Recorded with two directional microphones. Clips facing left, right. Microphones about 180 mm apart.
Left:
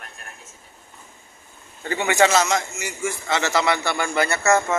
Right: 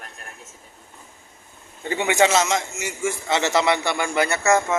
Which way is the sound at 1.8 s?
20° right (ahead or behind).